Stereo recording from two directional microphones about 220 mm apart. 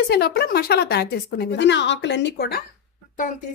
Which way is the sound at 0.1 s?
45° left (ahead or behind).